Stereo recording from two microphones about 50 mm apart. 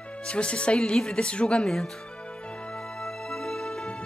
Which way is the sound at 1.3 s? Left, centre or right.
Centre.